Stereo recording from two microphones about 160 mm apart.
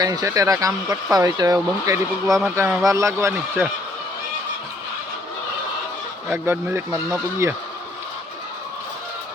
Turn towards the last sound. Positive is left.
turn(degrees=-15)  # may be behind; listen again after turning